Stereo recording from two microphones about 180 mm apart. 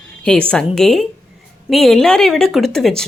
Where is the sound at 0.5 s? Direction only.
5° left (ahead or behind).